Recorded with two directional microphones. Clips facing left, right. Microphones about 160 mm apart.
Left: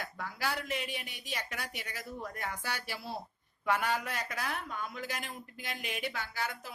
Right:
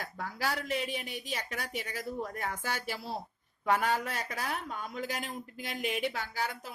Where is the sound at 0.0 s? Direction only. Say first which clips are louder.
Right 2 dB; 40° right (ahead or behind).